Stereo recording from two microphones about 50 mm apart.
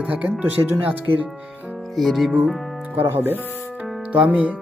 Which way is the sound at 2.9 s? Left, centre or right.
Right.